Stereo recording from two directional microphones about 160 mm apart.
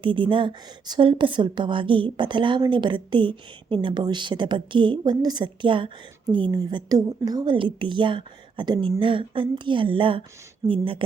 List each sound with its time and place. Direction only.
0.0 s a woman's voice: 30° right (ahead or behind)